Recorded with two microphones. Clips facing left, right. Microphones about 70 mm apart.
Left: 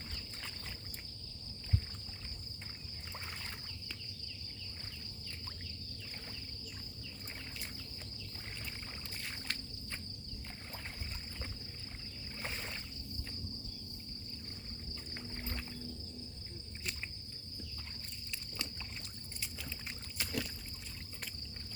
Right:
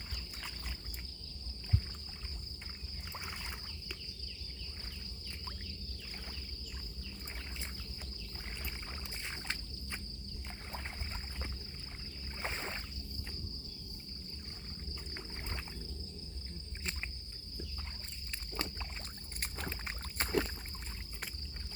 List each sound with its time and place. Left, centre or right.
3.1 s rowboat: centre
9.2 s a sound: right
12.4 s rowboat: right
15.1 s rowboat: centre
18.3 s rowboat: right
19.4 s rowboat: right